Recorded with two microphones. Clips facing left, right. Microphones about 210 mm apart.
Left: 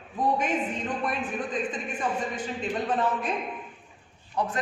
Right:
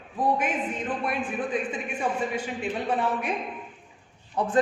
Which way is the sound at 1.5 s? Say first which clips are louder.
Right 1 dB; 10° right (ahead or behind).